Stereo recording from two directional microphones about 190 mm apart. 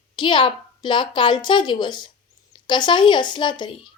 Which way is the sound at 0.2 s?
25° left (ahead or behind).